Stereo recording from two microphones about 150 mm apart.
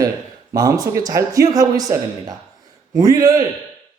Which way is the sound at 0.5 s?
25° right (ahead or behind).